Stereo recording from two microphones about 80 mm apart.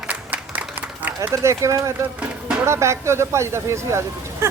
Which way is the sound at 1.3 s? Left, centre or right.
Right.